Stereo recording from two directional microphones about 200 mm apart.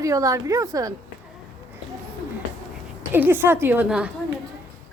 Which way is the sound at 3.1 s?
10° right (ahead or behind).